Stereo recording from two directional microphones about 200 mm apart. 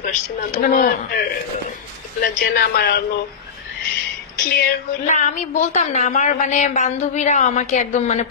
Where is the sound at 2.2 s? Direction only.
55° left (ahead or behind).